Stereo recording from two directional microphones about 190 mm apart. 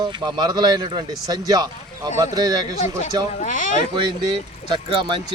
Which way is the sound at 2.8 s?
40° left (ahead or behind).